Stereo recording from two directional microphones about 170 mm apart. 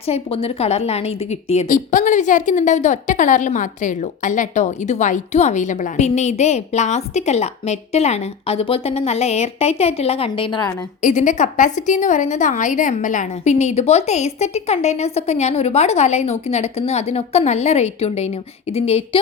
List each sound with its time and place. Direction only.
0.0 s a woman's voice: 35° left (ahead or behind)
11.0 s a woman's voice: 45° left (ahead or behind)